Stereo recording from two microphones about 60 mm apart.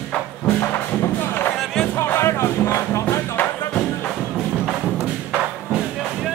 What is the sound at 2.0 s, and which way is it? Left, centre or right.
Music, left.